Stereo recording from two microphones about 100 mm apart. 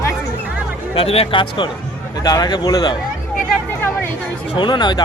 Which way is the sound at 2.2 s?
40° left (ahead or behind).